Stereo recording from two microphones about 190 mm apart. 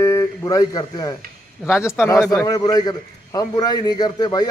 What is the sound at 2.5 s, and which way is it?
A man's voice, 20° left (ahead or behind).